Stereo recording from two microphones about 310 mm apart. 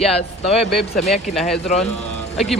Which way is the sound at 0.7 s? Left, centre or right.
Centre.